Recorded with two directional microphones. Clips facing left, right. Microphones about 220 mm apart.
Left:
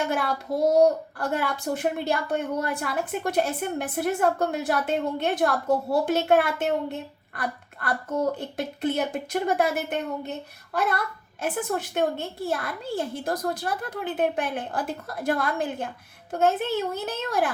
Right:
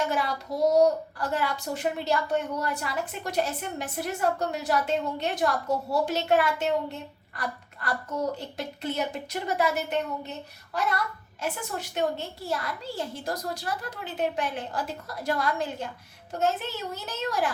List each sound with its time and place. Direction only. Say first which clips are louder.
0.1 s a woman's voice: left 3 dB; 55° left (ahead or behind)